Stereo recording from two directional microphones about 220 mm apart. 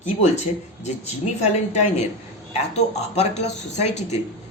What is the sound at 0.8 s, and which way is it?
Speech, 30° left (ahead or behind).